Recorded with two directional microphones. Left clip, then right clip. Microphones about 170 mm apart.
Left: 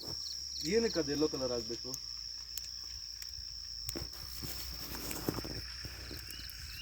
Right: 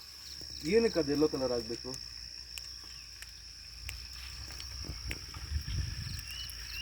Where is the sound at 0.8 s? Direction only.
Centre (ahead or behind).